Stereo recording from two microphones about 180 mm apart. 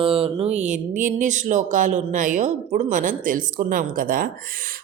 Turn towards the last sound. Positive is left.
turn(degrees=-50)  # may be behind; listen again after turning